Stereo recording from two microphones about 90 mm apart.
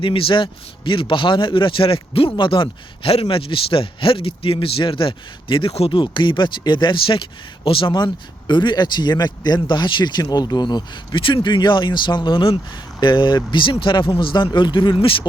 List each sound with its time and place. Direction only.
0.0 s a man's voice: 75° left (ahead or behind)
7.6 s speech: 80° left
13.0 s a man's voice: 60° left (ahead or behind)